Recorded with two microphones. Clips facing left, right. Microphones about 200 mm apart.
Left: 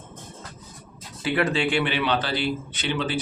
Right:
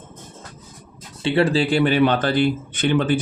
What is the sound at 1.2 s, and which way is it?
Speech, 30° right (ahead or behind).